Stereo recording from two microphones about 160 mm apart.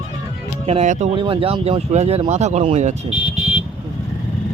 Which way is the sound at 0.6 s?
35° right (ahead or behind).